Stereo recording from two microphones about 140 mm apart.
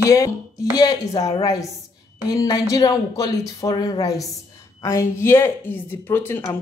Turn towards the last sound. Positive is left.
turn(degrees=15)  # may be behind; listen again after turning